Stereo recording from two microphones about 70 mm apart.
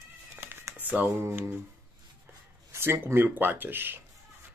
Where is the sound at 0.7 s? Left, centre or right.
Right.